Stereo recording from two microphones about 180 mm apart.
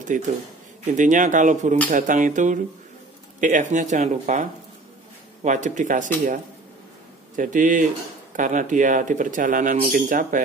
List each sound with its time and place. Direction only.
0.1 s speech: 45° right (ahead or behind)
7.3 s speech: 45° right (ahead or behind)